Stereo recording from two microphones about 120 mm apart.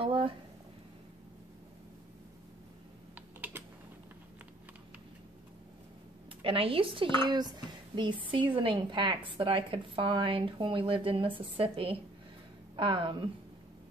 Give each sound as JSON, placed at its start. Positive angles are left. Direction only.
{"t": 0.0, "sound": "a sound", "side_deg": -45}
{"t": 3.3, "sound": "typing", "side_deg": -15}
{"t": 6.4, "sound": "speech", "side_deg": -50}